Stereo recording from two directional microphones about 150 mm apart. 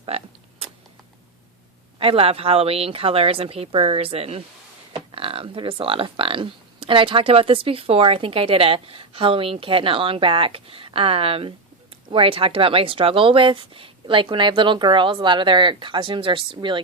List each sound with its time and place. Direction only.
0.1 s speech: 45° right (ahead or behind)
0.6 s a sound: 40° right (ahead or behind)
2.0 s speech: 40° right (ahead or behind)